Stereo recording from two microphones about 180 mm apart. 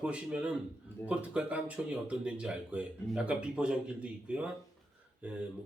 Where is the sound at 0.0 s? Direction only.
5° right (ahead or behind).